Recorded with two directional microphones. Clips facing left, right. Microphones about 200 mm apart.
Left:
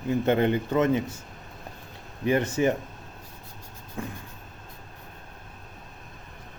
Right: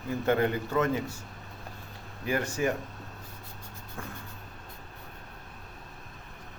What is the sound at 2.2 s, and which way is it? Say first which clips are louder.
Speech: left 6 dB; 20° left (ahead or behind).